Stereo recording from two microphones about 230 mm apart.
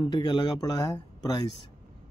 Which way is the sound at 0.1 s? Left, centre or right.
Centre.